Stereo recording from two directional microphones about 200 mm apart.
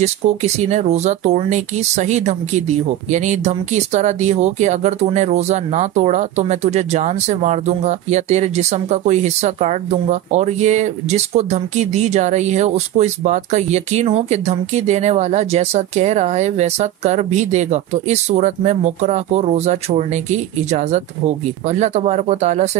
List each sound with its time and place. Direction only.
0.0 s speech: 35° right (ahead or behind)